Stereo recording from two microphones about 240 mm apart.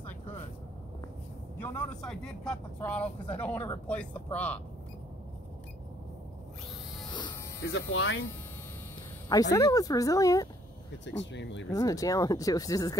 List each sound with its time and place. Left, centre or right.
1.6 s speech: centre
7.7 s speech: left
9.3 s speech: centre
11.1 s speech: left
11.7 s speech: centre